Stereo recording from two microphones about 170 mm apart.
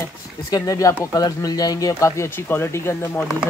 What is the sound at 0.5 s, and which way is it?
Speech, 20° left (ahead or behind).